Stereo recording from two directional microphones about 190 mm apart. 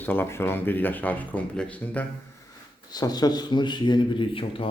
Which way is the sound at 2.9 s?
20° left (ahead or behind).